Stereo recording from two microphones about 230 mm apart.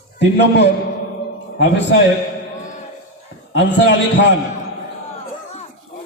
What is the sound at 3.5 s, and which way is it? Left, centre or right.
Speech, left.